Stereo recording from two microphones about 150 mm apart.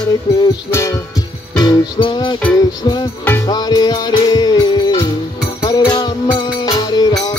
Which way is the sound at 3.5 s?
25° left (ahead or behind).